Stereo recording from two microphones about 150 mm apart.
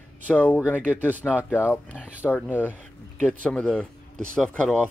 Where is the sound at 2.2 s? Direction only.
10° left (ahead or behind).